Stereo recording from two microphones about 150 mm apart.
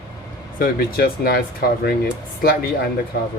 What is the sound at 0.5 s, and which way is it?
Speech, 80° left.